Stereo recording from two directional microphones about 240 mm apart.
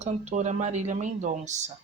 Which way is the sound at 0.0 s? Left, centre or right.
Right.